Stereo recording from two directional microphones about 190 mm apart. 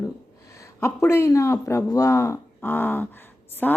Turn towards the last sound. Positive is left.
turn(degrees=10)  # may be behind; listen again after turning